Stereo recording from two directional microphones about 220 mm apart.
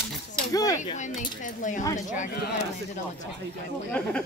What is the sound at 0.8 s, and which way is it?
Speech, 35° left (ahead or behind).